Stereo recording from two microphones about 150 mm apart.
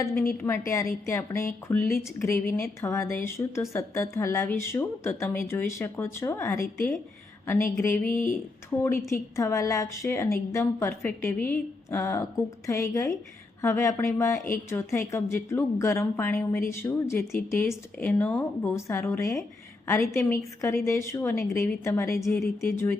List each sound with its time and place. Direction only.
0.0 s a woman's voice: 15° left (ahead or behind)
8.0 s speech: 65° left (ahead or behind)
8.8 s a woman's voice: 20° left (ahead or behind)